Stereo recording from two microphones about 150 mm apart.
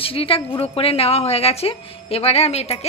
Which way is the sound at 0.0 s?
40° left (ahead or behind).